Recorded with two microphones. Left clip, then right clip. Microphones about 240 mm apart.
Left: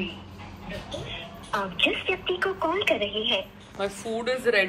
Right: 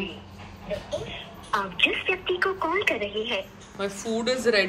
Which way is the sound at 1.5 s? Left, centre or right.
Centre.